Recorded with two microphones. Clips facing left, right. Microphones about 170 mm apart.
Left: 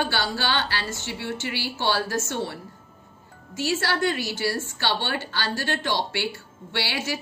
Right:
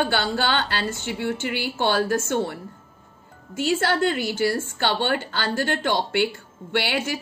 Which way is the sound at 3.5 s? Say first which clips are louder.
Right 4 dB; 55° right (ahead or behind).